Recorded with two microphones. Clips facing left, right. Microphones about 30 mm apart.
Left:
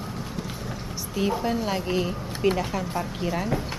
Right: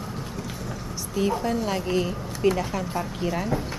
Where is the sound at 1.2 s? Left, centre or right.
Centre.